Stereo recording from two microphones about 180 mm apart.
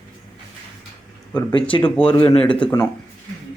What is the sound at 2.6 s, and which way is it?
Speech, 25° left (ahead or behind).